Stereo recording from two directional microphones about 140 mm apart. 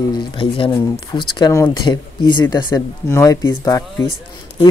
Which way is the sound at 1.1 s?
25° left (ahead or behind).